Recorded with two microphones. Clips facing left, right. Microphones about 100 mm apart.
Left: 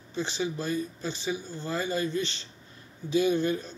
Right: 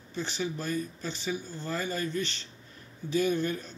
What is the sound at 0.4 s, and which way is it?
A man's voice, 15° left (ahead or behind).